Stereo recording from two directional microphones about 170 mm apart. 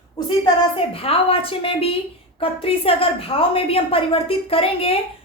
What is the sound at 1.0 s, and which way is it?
A woman's voice, 35° left (ahead or behind).